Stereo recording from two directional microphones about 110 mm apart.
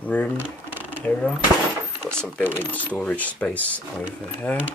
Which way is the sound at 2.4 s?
15° right (ahead or behind).